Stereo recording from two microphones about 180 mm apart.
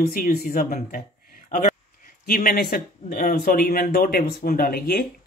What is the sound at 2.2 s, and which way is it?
Speech, 55° left (ahead or behind).